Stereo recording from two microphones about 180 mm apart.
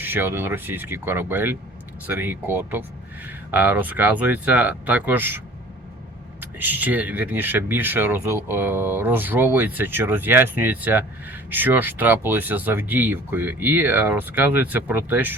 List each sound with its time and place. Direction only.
0.0 s speech: 10° right (ahead or behind)
6.4 s speech: 10° right (ahead or behind)